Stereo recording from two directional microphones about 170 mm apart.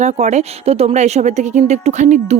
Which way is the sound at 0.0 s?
40° right (ahead or behind).